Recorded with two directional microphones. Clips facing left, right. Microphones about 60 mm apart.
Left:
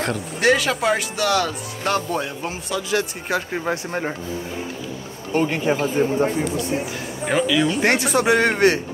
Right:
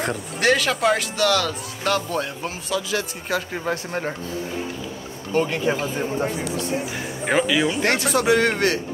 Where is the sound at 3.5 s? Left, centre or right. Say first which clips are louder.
Left 2 dB; centre.